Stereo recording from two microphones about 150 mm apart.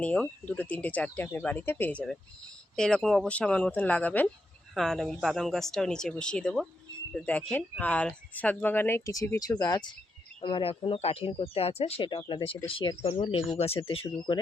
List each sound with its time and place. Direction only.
0.0 s speech: 10° left (ahead or behind); by 9.9 s 25° left (ahead or behind)
10.4 s speech: 35° left (ahead or behind)